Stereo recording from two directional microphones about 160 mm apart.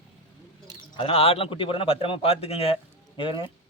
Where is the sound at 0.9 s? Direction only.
35° left (ahead or behind).